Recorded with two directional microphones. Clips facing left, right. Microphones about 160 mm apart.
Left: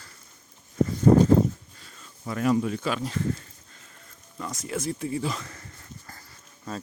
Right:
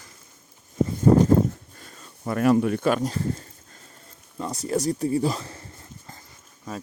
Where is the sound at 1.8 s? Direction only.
45° right (ahead or behind).